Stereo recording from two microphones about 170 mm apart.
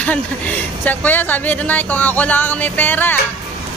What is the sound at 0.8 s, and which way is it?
Speech, 10° left (ahead or behind).